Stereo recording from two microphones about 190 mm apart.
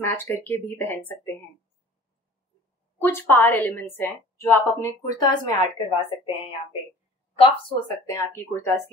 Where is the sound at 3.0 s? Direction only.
10° left (ahead or behind).